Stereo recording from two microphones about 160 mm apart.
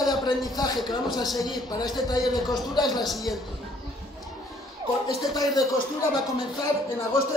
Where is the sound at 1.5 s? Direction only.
25° left (ahead or behind).